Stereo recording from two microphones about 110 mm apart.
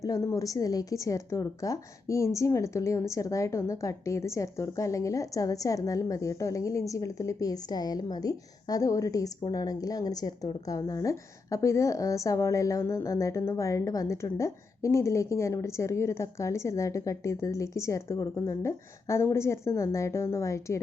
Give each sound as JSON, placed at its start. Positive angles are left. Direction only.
{"t": 0.0, "sound": "a woman's voice", "side_deg": 30}